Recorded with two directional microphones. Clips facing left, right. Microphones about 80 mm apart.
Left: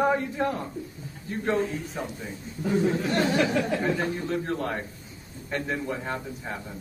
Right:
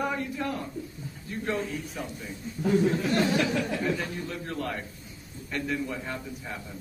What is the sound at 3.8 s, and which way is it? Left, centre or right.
A man's voice, left.